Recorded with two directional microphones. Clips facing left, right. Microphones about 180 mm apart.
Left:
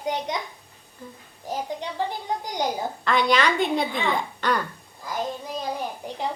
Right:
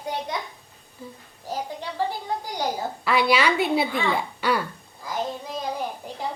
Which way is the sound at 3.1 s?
10° right (ahead or behind).